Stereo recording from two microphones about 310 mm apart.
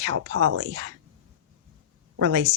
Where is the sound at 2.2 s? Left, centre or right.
Right.